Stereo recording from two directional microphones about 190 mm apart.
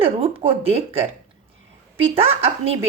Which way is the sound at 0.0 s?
30° right (ahead or behind).